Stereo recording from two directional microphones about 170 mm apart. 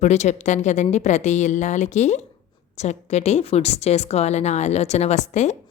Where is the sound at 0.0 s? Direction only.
40° left (ahead or behind).